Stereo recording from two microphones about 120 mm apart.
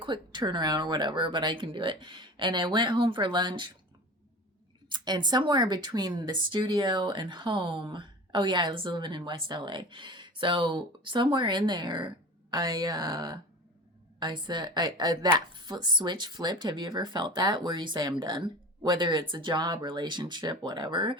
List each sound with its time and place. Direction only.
0.0 s a woman's voice: 40° right (ahead or behind)
4.9 s a woman's voice: 40° right (ahead or behind)